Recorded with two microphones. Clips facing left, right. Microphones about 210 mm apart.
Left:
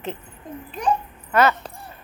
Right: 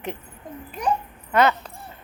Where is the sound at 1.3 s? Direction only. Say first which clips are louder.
Left 1 dB; 15° right (ahead or behind).